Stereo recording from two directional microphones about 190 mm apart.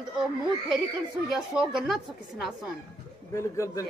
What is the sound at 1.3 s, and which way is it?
Speech, centre (ahead or behind).